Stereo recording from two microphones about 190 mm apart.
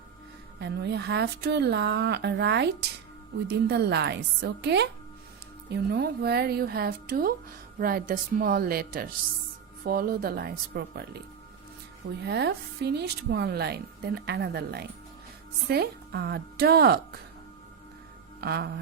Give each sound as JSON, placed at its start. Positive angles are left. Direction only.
{"t": 0.6, "sound": "speech", "side_deg": -60}
{"t": 12.2, "sound": "speech", "side_deg": -60}
{"t": 18.3, "sound": "speech", "side_deg": -55}